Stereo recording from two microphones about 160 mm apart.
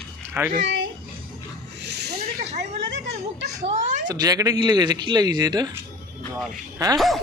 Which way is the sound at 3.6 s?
50° right (ahead or behind).